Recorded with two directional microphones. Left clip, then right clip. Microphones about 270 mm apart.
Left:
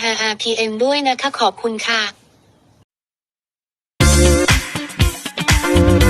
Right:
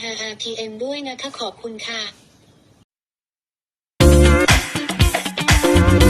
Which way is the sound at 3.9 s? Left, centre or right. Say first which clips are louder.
Even; centre.